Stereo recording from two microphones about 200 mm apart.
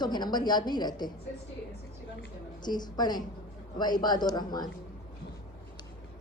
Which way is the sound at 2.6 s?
20° left (ahead or behind).